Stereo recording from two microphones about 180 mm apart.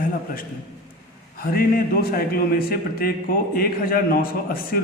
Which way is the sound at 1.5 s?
55° left (ahead or behind).